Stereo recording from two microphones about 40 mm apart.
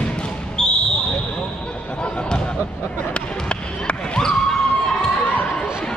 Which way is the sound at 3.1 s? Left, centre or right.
Left.